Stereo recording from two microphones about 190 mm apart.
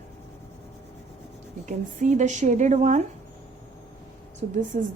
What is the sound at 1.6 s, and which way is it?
A woman's voice, 40° right (ahead or behind).